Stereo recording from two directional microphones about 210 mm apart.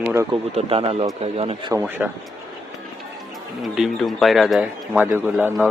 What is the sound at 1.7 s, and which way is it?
Speech, 10° right (ahead or behind).